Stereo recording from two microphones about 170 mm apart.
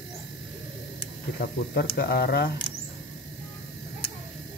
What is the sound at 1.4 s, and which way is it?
Speech, 70° left (ahead or behind).